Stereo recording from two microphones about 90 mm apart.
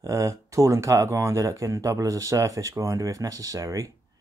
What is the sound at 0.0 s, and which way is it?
Speech, 40° right (ahead or behind).